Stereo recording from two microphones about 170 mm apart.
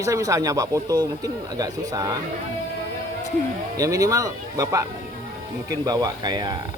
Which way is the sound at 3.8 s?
20° right (ahead or behind).